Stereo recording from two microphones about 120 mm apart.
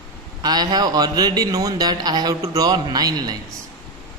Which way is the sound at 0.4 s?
35° right (ahead or behind).